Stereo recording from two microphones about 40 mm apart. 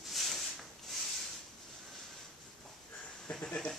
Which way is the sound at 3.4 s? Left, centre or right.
Left.